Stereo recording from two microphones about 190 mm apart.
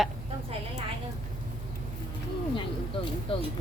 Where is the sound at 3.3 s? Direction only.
30° left (ahead or behind).